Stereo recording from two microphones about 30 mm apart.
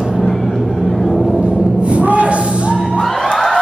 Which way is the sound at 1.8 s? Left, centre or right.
Right.